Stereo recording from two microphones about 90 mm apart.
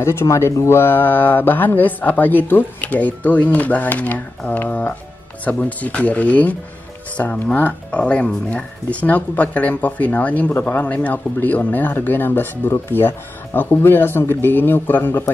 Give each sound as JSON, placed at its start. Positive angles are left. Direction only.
{"t": 0.0, "sound": "speech", "side_deg": 30}